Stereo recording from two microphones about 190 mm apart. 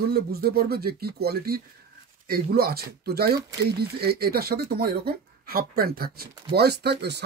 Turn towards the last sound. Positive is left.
turn(degrees=-60)  # may be behind; listen again after turning